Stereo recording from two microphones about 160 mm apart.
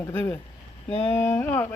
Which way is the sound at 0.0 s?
15° left (ahead or behind).